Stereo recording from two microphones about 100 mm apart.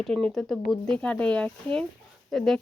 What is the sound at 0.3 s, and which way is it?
Speech, centre (ahead or behind).